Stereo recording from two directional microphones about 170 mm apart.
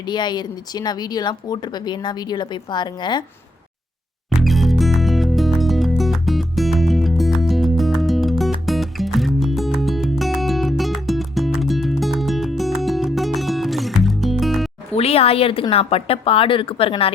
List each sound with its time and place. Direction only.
0.1 s speech: 25° left (ahead or behind)
4.4 s music: centre (ahead or behind)
14.9 s a woman's voice: 35° left (ahead or behind)